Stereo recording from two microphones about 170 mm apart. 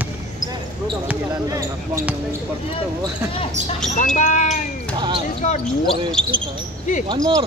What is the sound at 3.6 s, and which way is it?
Speech, 45° right (ahead or behind).